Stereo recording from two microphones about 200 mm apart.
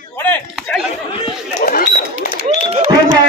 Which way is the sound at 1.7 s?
50° left (ahead or behind).